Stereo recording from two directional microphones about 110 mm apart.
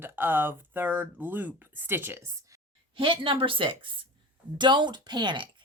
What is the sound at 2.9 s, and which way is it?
A woman's voice, 50° right (ahead or behind).